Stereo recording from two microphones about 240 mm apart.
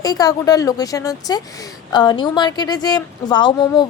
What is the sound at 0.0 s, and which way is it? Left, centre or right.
Speech, centre.